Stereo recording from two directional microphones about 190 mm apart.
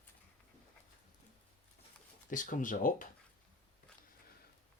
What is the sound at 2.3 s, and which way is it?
Speech, 45° left (ahead or behind).